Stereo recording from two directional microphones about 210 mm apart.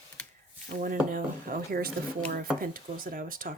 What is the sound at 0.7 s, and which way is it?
Speech, 40° right (ahead or behind).